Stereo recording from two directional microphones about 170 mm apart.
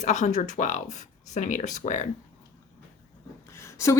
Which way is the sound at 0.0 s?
45° left (ahead or behind).